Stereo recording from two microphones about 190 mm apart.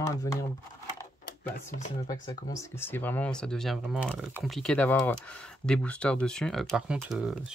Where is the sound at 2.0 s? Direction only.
20° left (ahead or behind).